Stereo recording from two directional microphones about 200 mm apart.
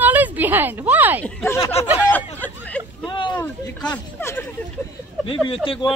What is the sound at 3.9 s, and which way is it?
Speech, 10° left (ahead or behind).